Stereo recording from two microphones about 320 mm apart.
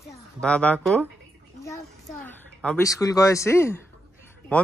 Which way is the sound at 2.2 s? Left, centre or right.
Centre.